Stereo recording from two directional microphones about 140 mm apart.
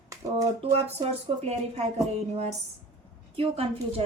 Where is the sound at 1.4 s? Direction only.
50° right (ahead or behind).